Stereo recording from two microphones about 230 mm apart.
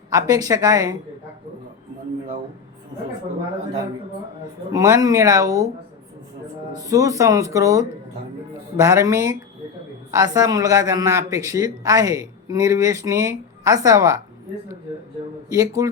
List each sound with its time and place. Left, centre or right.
0.1 s a man's voice: centre
4.7 s a man's voice: centre
6.7 s a man's voice: centre
15.4 s a man's voice: centre